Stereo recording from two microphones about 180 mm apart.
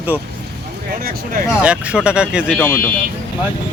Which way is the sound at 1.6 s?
5° right (ahead or behind).